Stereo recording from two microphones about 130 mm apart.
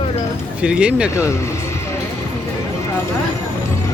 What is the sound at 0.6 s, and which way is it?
Speech, 10° right (ahead or behind).